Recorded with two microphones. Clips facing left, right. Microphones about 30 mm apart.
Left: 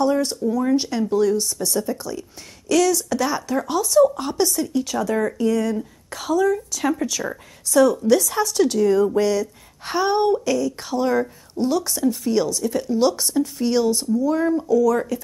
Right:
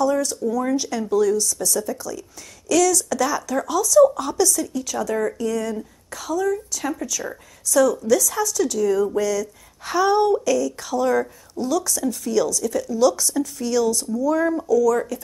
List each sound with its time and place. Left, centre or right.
0.0 s a woman's voice: left
4.7 s speech: left
9.9 s a woman's voice: left
11.5 s a woman's voice: left
14.7 s speech: left